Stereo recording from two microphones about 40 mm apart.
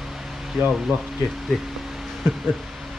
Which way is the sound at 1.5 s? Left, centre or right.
Centre.